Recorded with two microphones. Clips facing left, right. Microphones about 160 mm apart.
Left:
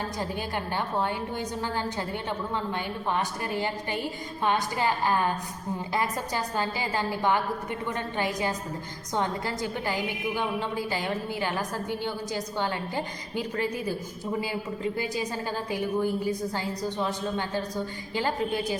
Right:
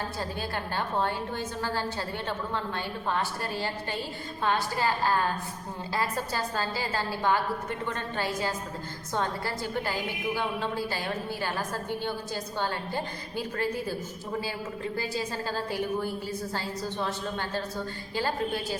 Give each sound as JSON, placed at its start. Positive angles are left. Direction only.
{"t": 0.2, "sound": "a woman's voice", "side_deg": 15}
{"t": 14.9, "sound": "a woman's voice", "side_deg": 15}